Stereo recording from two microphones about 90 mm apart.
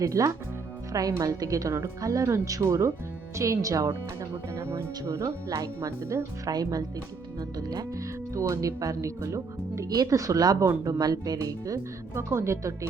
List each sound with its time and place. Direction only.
0.0 s speech: 35° right (ahead or behind)